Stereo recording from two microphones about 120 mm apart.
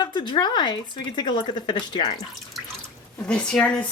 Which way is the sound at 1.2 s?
40° left (ahead or behind).